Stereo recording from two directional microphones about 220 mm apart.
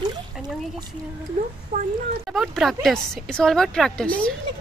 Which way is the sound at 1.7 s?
35° right (ahead or behind).